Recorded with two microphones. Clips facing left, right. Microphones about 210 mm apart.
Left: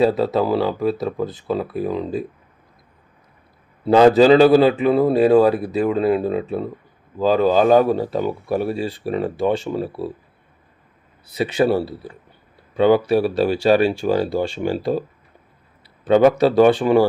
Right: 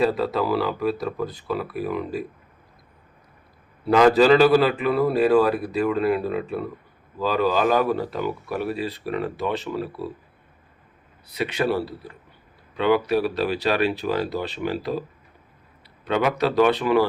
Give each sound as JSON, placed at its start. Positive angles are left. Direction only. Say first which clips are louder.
{"t": 0.0, "sound": "a man's voice", "louder": "left 5 dB", "side_deg": 25}
{"t": 3.8, "sound": "a man's voice", "louder": "left 4 dB", "side_deg": 25}
{"t": 11.3, "sound": "a man's voice", "louder": "left 5 dB", "side_deg": 30}
{"t": 16.4, "sound": "a man's voice", "louder": "left 6 dB", "side_deg": 30}